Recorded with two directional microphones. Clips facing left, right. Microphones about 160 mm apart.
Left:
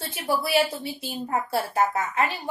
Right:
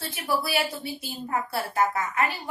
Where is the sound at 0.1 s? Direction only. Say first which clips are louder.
Left 3 dB; 25° left (ahead or behind).